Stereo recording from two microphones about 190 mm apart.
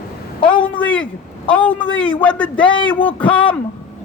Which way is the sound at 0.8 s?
10° left (ahead or behind).